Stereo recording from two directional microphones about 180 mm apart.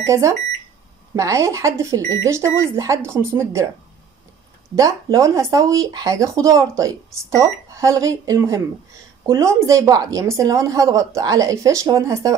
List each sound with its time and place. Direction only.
0.0 s speech: 15° right (ahead or behind)
4.7 s speech: 20° right (ahead or behind)